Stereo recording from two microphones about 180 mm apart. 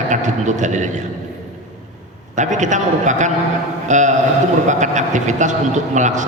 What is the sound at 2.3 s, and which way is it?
A man's voice, 40° right (ahead or behind).